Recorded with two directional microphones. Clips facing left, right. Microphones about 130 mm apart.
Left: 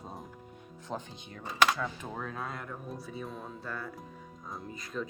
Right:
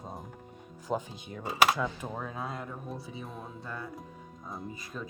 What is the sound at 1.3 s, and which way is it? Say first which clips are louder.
Speech: right 2 dB; 15° right (ahead or behind).